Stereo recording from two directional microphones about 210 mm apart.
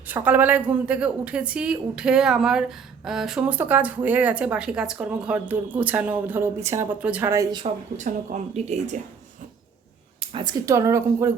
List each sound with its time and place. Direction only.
0.1 s a woman's voice: 10° right (ahead or behind)
7.9 s speech: 35° right (ahead or behind)
10.2 s a sound: 25° right (ahead or behind)
10.7 s a woman's voice: 15° right (ahead or behind)